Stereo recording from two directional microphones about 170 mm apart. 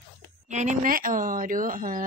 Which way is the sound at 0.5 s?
45° right (ahead or behind).